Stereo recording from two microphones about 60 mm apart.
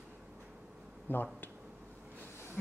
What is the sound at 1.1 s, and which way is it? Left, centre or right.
Speech, left.